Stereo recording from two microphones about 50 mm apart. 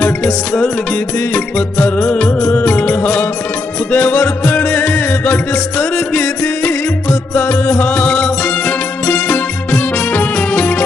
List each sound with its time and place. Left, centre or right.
0.2 s music: left